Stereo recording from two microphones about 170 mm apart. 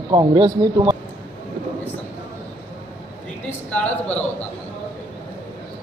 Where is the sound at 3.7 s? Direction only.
10° left (ahead or behind).